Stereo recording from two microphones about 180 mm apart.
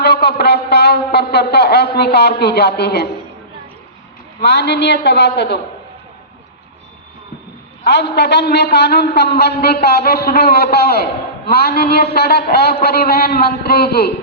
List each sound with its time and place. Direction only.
0.0 s a man's voice: 65° left (ahead or behind)
4.4 s a woman's voice: 65° left (ahead or behind)
7.9 s a man's voice: 70° left (ahead or behind)